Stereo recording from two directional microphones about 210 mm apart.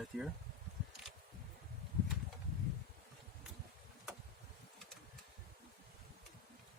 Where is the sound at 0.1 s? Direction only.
Centre (ahead or behind).